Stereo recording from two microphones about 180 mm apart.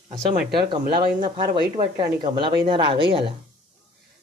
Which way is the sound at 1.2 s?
25° right (ahead or behind).